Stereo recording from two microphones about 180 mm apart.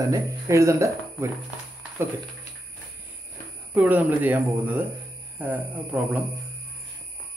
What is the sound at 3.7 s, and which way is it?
Speech, 10° right (ahead or behind).